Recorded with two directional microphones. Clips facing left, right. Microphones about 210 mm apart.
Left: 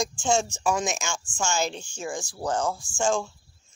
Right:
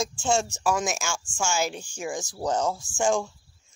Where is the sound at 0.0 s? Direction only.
5° right (ahead or behind).